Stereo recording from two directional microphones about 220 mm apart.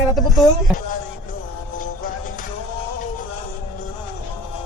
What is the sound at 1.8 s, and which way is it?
Music, 40° left (ahead or behind).